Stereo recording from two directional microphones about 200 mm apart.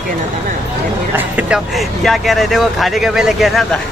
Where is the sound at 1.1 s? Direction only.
10° right (ahead or behind).